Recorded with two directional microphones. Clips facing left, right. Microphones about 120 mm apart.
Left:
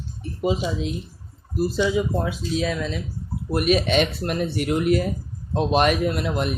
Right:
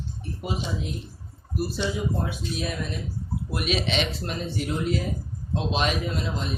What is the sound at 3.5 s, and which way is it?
Speech, 50° left (ahead or behind).